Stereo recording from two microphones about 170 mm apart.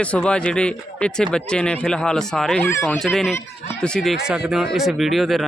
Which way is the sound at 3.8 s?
5° left (ahead or behind).